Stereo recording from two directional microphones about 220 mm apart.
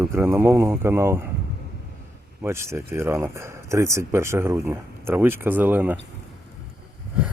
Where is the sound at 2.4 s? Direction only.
10° right (ahead or behind).